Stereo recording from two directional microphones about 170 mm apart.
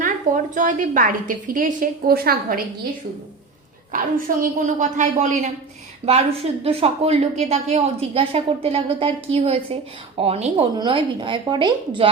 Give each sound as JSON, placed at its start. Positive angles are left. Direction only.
{"t": 0.5, "sound": "a woman's voice", "side_deg": -50}
{"t": 3.9, "sound": "a woman's voice", "side_deg": -50}
{"t": 6.1, "sound": "a woman's voice", "side_deg": -35}